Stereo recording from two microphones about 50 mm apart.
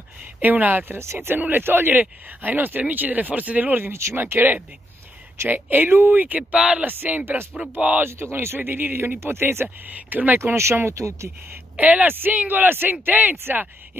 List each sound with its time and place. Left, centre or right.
0.4 s speech: right
0.9 s speech: right
1.5 s speech: right
3.9 s speech: right
4.2 s speech: right
6.6 s speech: right
7.1 s speech: right
8.0 s speech: right
9.2 s speech: right
9.8 s speech: right
10.4 s speech: right
10.9 s speech: right
11.7 s speech: right
13.4 s speech: right